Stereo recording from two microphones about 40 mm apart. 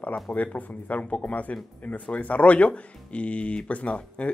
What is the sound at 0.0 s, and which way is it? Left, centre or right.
Speech, left.